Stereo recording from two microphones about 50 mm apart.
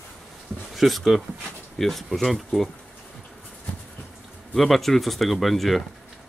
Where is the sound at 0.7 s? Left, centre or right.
Centre.